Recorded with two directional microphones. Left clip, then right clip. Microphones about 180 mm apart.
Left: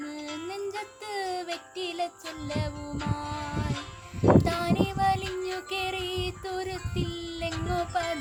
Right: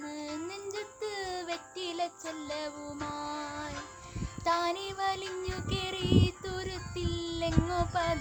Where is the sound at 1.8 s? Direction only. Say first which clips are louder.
Left 3 dB; 10° right (ahead or behind).